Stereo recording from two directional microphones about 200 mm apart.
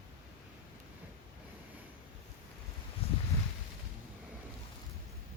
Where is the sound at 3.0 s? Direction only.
30° left (ahead or behind).